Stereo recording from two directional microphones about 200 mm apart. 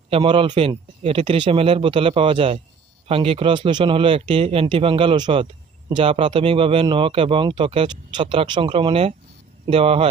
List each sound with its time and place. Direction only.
0.1 s speech: 25° right (ahead or behind)